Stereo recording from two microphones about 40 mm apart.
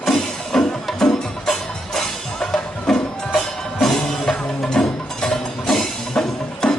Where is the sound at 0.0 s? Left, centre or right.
Centre.